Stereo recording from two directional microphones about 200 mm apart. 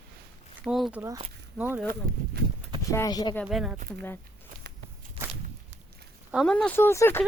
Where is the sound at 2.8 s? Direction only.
15° left (ahead or behind).